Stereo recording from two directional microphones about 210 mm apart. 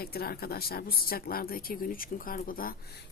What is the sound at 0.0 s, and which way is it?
Speech, 45° left (ahead or behind).